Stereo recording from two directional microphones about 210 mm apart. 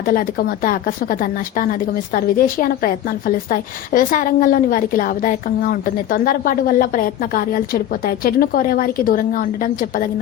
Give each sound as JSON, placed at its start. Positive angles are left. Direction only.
{"t": 0.0, "sound": "speech", "side_deg": 45}